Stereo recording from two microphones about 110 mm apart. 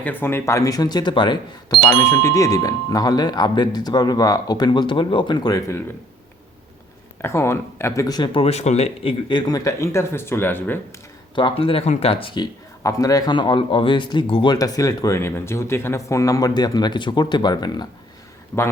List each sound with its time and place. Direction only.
0.0 s speech: 15° left (ahead or behind); by 1.4 s 45° left (ahead or behind)
2.0 s speech: 30° left (ahead or behind)
7.2 s speech: 20° left (ahead or behind)
8.3 s speech: 65° left (ahead or behind)
9.5 s speech: 30° left (ahead or behind)
11.3 s speech: 50° left (ahead or behind)
12.8 s speech: 30° left (ahead or behind); by 14.5 s 50° left (ahead or behind)
14.5 s speech: 35° left (ahead or behind)
18.5 s speech: 30° left (ahead or behind)